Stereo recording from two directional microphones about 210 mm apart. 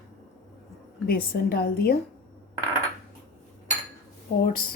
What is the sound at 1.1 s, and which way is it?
Speech, 45° left (ahead or behind).